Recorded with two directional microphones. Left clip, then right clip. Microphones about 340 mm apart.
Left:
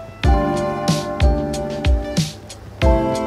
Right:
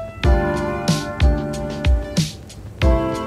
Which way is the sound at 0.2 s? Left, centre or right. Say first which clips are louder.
Left 2 dB; centre.